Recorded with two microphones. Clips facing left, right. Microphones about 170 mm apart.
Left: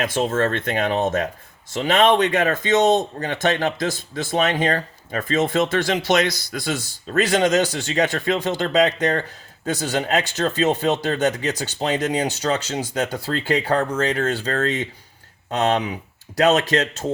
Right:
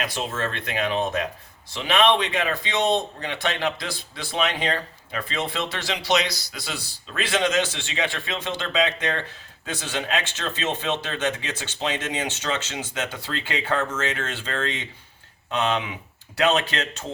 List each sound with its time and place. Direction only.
0.0 s a man's voice: 45° left (ahead or behind)